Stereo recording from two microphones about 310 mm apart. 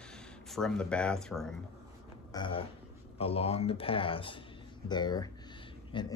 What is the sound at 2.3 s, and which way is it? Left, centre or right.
Speech, centre.